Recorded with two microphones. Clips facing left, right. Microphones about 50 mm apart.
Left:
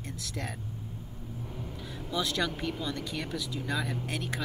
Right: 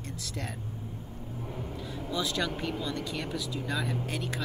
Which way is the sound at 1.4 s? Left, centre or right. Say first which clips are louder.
Right 3 dB; right.